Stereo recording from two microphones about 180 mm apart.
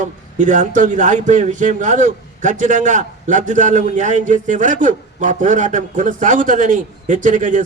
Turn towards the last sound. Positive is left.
turn(degrees=-45)  # may be behind; listen again after turning